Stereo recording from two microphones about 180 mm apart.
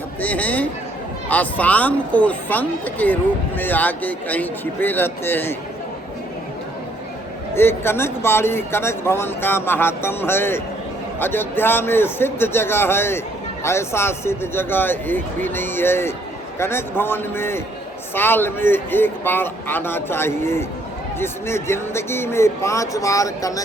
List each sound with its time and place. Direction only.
0.2 s speech: 10° left (ahead or behind)
7.5 s speech: 15° left (ahead or behind)